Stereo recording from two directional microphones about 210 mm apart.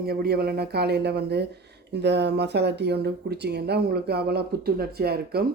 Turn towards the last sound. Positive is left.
turn(degrees=-50)  # may be behind; listen again after turning